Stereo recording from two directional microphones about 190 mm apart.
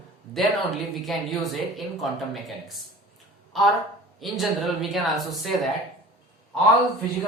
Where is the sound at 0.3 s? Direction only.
Centre (ahead or behind).